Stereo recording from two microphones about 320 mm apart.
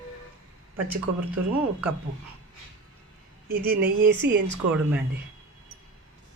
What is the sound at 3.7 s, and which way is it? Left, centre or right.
Speech, right.